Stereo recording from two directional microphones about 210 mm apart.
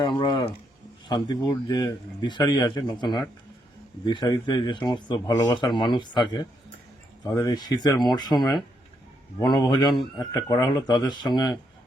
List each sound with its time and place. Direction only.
0.0 s speech: 20° left (ahead or behind)